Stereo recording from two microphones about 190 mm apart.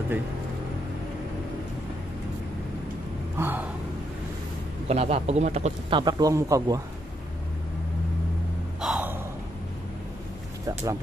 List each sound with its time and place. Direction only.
3.3 s gasp: 10° right (ahead or behind)
4.8 s a man's voice: 35° right (ahead or behind); by 6.8 s 20° right (ahead or behind)
8.8 s gasp: 10° right (ahead or behind)